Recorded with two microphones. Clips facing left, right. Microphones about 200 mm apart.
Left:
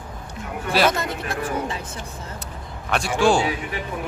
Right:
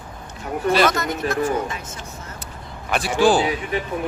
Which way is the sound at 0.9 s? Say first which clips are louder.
Right 2 dB; 30° left (ahead or behind).